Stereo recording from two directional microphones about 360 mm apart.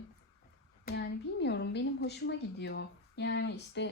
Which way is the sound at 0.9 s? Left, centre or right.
Left.